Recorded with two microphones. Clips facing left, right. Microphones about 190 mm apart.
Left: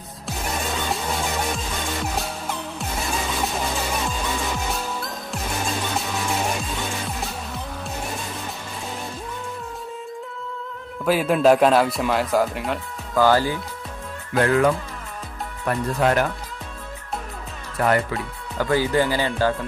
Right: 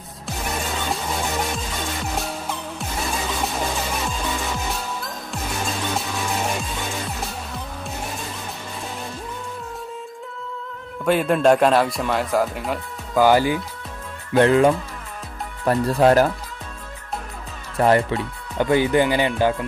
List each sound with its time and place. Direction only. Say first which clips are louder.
11.1 s speech: even; 5° left (ahead or behind)
13.1 s speech: right 2 dB; 15° right (ahead or behind)
14.3 s speech: right 3 dB; 25° right (ahead or behind)
17.7 s speech: right 3 dB; 25° right (ahead or behind)